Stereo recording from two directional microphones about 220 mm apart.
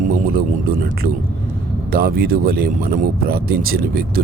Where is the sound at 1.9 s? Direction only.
45° right (ahead or behind).